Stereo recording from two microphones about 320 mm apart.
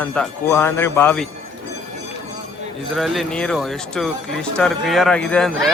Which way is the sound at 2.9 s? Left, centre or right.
Centre.